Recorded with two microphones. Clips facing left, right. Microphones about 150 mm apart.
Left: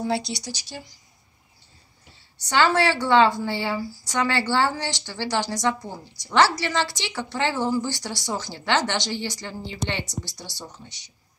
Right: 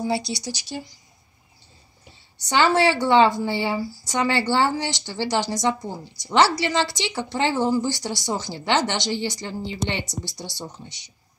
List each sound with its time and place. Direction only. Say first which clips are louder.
0.2 s speech: right 3 dB; 20° left (ahead or behind)
2.5 s a woman's voice: right 2 dB; 15° right (ahead or behind)